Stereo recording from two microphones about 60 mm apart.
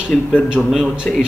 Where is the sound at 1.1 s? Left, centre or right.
Centre.